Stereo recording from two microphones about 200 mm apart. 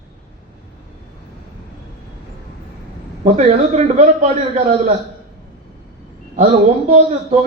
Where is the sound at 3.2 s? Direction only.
35° right (ahead or behind).